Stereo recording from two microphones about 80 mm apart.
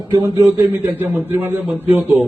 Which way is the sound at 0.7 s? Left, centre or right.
Right.